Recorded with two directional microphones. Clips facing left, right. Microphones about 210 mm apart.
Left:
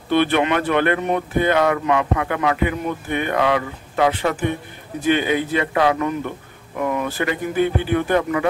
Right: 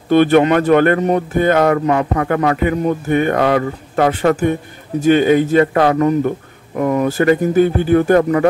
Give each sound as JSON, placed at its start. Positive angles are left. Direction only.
{"t": 0.1, "sound": "speech", "side_deg": -45}